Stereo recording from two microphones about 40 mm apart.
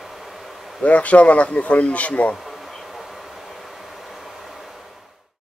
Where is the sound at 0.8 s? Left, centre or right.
Left.